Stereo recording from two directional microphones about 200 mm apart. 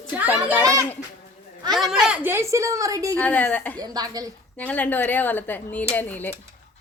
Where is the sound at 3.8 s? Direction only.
20° right (ahead or behind).